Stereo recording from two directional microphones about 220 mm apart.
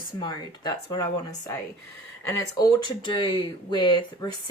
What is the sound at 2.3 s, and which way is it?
A woman's voice, 15° left (ahead or behind).